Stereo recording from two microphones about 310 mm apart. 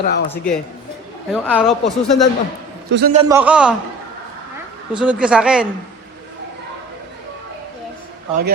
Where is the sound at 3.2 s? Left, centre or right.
Centre.